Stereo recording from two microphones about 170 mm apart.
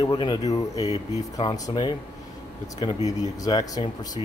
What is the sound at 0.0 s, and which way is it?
Speech, 25° left (ahead or behind).